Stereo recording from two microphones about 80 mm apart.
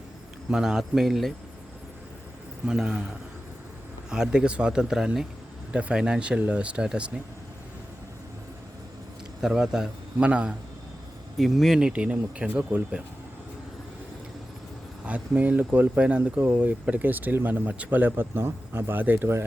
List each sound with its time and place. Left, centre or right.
0.5 s a man's voice: centre
2.6 s speech: centre
4.1 s speech: centre
9.4 s speech: centre
11.3 s a man's voice: centre
11.8 s speech: centre
15.0 s speech: centre